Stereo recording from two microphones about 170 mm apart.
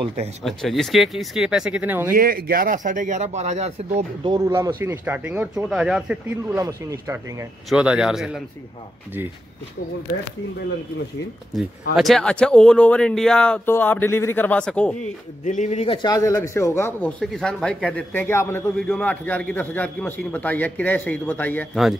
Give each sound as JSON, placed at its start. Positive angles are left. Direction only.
{"t": 0.0, "sound": "speech", "side_deg": -35}
{"t": 0.4, "sound": "speech", "side_deg": 0}
{"t": 2.1, "sound": "speech", "side_deg": -60}
{"t": 4.2, "sound": "speech", "side_deg": -20}
{"t": 6.5, "sound": "speech", "side_deg": -20}
{"t": 7.7, "sound": "speech", "side_deg": -5}
{"t": 11.9, "sound": "speech", "side_deg": 0}
{"t": 15.4, "sound": "speech", "side_deg": 45}
{"t": 16.0, "sound": "a man's voice", "side_deg": 20}
{"t": 17.2, "sound": "a man's voice", "side_deg": 0}